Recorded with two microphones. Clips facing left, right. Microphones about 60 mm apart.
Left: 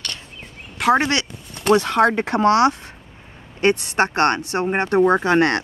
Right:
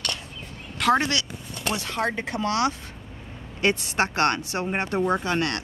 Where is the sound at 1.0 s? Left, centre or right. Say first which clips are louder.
Left 5 dB; left.